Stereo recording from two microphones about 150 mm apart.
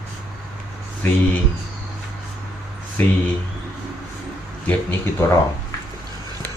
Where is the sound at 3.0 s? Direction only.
10° left (ahead or behind).